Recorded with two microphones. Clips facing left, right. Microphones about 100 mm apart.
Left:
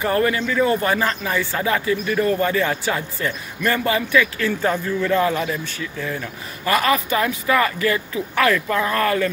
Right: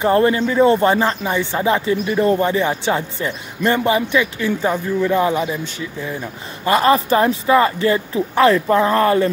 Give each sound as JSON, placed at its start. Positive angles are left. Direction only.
{"t": 0.0, "sound": "speech", "side_deg": -25}